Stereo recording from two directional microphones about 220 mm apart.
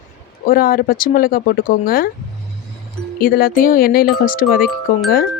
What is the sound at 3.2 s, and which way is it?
Speech, 40° left (ahead or behind).